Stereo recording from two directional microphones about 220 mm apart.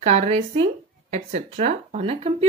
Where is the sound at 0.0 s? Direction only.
30° right (ahead or behind).